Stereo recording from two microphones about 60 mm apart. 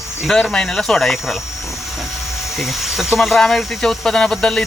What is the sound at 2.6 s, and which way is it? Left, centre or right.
Speech, centre.